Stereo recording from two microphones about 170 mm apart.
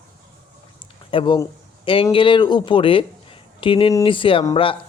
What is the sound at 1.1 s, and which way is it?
Speech, 30° left (ahead or behind).